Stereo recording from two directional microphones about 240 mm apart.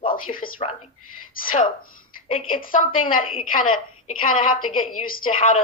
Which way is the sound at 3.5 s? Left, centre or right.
Left.